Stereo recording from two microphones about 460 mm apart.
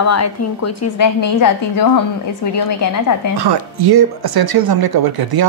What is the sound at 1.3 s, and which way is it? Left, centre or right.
Speech, left.